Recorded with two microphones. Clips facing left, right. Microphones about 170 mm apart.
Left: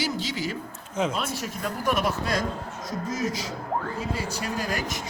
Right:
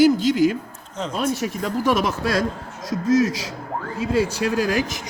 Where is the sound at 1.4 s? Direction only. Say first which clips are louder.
Right 6 dB; 90° right.